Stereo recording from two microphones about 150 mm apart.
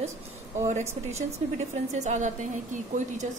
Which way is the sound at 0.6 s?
50° right (ahead or behind).